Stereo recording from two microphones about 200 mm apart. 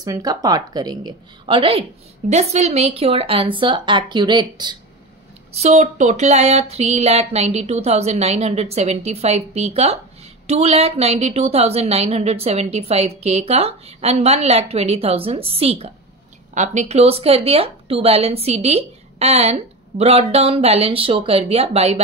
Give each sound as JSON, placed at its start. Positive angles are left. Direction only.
{"t": 0.0, "sound": "a woman's voice", "side_deg": -20}
{"t": 5.5, "sound": "a woman's voice", "side_deg": -35}